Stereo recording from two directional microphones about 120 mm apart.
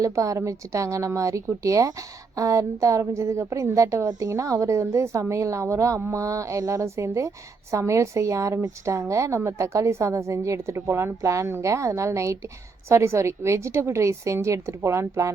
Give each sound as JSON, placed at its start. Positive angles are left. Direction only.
{"t": 0.0, "sound": "a woman's voice", "side_deg": -25}